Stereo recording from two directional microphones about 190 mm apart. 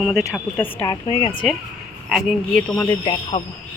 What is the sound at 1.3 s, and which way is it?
Speech, 10° left (ahead or behind).